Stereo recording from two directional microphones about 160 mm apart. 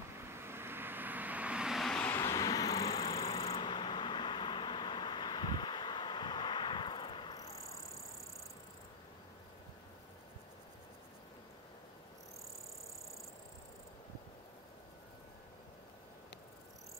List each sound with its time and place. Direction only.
0.3 s vehicle: 15° right (ahead or behind); by 7.7 s 40° left (ahead or behind)